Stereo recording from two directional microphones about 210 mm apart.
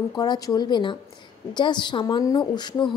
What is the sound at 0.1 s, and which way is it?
A woman's voice, 20° left (ahead or behind).